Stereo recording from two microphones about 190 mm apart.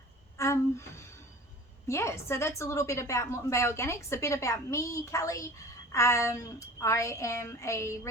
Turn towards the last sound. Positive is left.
turn(degrees=15)  # may be behind; listen again after turning